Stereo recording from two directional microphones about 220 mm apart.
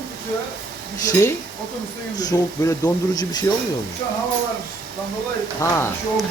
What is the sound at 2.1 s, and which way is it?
Speech, 15° left (ahead or behind).